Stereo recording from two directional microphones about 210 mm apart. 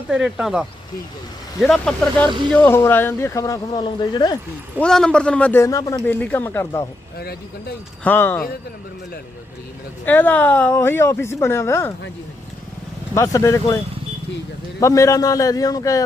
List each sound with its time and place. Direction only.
0.1 s speech: 5° right (ahead or behind)
1.6 s speech: 5° left (ahead or behind)
2.2 s speech: 20° right (ahead or behind)
2.5 s a man's voice: 10° left (ahead or behind)
4.8 s a man's voice: 5° left (ahead or behind)
8.0 s a man's voice: 10° left (ahead or behind)
10.1 s a man's voice: 10° left (ahead or behind)
13.1 s a man's voice: 15° left (ahead or behind)
14.8 s a man's voice: 15° left (ahead or behind)